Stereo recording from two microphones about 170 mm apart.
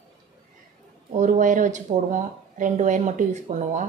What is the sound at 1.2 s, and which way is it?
A woman's voice, 50° right (ahead or behind).